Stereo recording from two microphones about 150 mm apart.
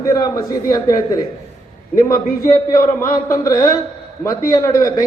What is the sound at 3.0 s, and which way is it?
Speech, 65° left (ahead or behind).